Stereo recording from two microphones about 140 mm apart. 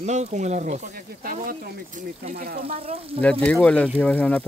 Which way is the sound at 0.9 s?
85° right.